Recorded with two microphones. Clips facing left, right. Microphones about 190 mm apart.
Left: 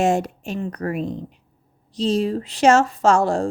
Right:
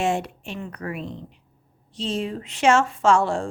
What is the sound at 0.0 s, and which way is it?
A woman's voice, 40° left (ahead or behind).